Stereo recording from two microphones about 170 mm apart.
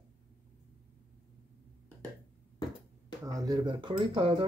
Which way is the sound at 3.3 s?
20° right (ahead or behind).